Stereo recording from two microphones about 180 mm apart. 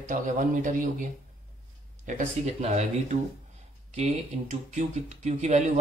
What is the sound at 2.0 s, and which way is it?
Speech, 40° right (ahead or behind).